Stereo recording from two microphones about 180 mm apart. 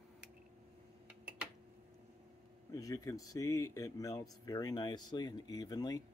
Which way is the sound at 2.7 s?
20° left (ahead or behind).